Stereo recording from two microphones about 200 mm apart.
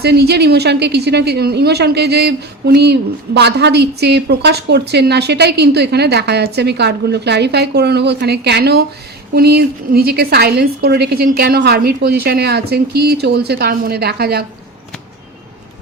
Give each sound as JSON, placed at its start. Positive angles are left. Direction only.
{"t": 0.0, "sound": "a woman's voice", "side_deg": -55}